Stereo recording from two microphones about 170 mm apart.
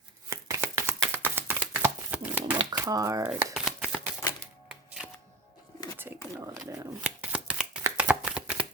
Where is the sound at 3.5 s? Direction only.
5° right (ahead or behind).